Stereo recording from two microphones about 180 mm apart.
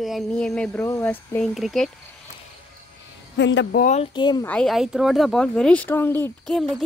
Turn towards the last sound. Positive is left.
turn(degrees=0)  # may be behind; listen again after turning